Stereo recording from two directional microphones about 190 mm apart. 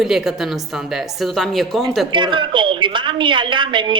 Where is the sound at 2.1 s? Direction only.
25° right (ahead or behind).